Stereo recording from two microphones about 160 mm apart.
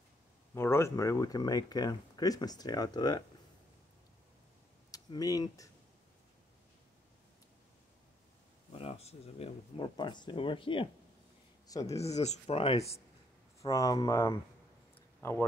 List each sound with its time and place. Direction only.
0.6 s speech: 15° left (ahead or behind)
4.9 s speech: 20° left (ahead or behind)
8.7 s speech: 40° left (ahead or behind)
9.8 s speech: 30° left (ahead or behind)
11.6 s speech: 20° left (ahead or behind)
11.9 s speech: 40° left (ahead or behind)
13.6 s speech: 20° left (ahead or behind)